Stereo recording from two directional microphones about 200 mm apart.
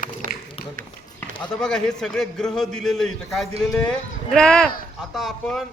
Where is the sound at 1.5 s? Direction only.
5° left (ahead or behind).